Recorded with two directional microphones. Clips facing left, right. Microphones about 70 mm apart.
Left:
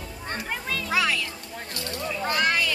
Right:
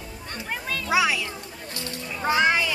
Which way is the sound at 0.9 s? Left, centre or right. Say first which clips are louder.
Right 3 dB; centre.